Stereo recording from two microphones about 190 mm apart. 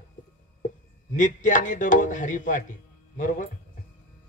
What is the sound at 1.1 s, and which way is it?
Speech, 40° left (ahead or behind).